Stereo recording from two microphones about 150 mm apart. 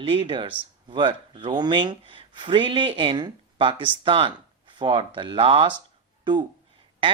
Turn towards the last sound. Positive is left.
turn(degrees=-35)  # may be behind; listen again after turning